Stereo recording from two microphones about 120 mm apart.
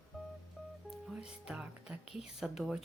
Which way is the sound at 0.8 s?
5° right (ahead or behind).